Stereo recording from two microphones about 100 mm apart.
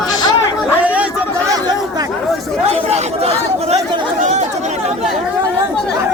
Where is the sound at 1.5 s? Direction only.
40° right (ahead or behind).